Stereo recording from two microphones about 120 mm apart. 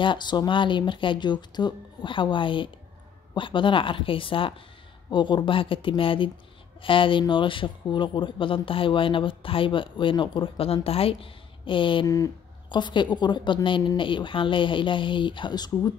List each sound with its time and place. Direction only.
0.0 s speech: 40° left (ahead or behind)